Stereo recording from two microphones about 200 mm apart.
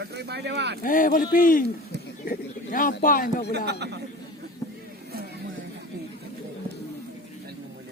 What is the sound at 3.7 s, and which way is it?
Speech, 55° right (ahead or behind).